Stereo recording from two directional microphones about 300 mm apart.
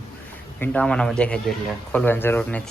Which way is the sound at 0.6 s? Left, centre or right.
Centre.